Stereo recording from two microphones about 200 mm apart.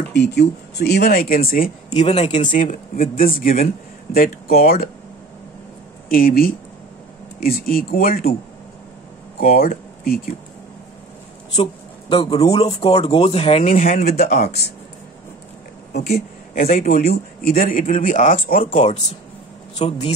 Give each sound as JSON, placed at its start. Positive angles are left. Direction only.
{"t": 0.1, "sound": "speech", "side_deg": 55}
{"t": 2.0, "sound": "speech", "side_deg": 30}
{"t": 6.0, "sound": "speech", "side_deg": 45}
{"t": 9.4, "sound": "speech", "side_deg": 45}
{"t": 11.5, "sound": "speech", "side_deg": 30}
{"t": 15.9, "sound": "speech", "side_deg": 50}